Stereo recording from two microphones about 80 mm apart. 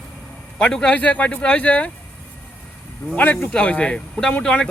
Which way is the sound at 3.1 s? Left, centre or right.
Centre.